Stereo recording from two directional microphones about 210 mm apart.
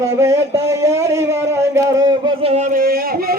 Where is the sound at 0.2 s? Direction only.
15° right (ahead or behind).